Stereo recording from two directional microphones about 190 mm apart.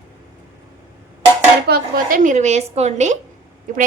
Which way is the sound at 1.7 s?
50° right (ahead or behind).